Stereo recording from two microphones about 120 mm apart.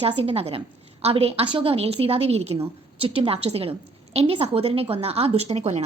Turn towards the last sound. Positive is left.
turn(degrees=-65)  # may be behind; listen again after turning